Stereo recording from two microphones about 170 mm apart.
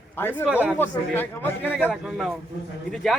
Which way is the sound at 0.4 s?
10° right (ahead or behind).